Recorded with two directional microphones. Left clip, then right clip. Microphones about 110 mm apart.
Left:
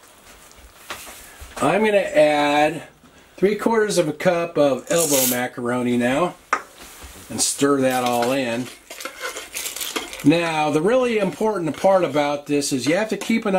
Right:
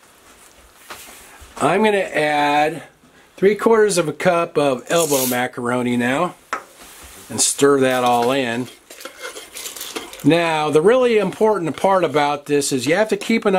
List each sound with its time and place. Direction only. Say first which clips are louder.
1.6 s a man's voice: right 2 dB; 75° right (ahead or behind)
2.1 s speech: left 1 dB; 45° right (ahead or behind)
5.0 s speech: right 1 dB; centre (ahead or behind)
5.7 s speech: even; 50° right (ahead or behind)
7.3 s speech: right 4 dB; 45° right (ahead or behind)
8.9 s cutlery: left 4 dB; 5° left (ahead or behind)
10.2 s speech: right 2 dB; 45° right (ahead or behind)